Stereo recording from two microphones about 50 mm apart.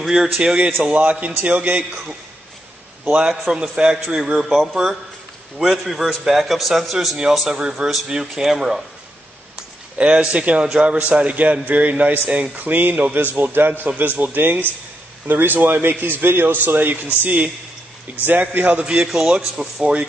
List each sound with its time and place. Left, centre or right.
0.0 s a man's voice: centre
0.8 s a man's voice: right
3.1 s a man's voice: centre
7.6 s a man's voice: centre
9.9 s a man's voice: right
18.9 s a man's voice: centre
19.8 s a man's voice: right